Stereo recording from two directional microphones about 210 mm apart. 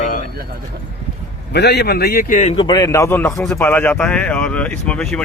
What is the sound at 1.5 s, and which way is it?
A man's voice, 50° left (ahead or behind).